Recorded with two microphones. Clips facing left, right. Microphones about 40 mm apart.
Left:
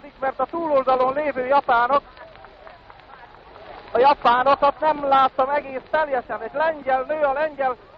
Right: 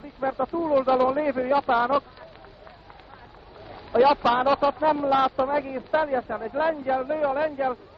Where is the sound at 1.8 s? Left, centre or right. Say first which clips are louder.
Left 4 dB; centre.